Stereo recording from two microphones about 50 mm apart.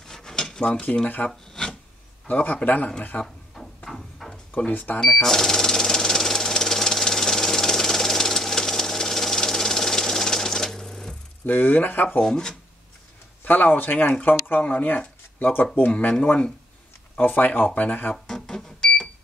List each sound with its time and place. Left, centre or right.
0.0 s drawer open or close: centre
0.8 s speech: left
1.5 s filing: centre
2.2 s speech: left
3.5 s a sound: centre
4.6 s speech: left
5.2 s engine: centre
11.4 s speech: left
12.2 s speech: centre
13.4 s speech: left
17.2 s speech: left
18.1 s cash register: centre